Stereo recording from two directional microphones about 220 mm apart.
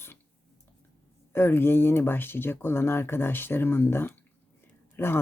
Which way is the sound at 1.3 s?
10° left (ahead or behind).